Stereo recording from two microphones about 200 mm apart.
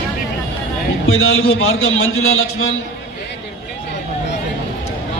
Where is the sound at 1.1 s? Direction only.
90° left.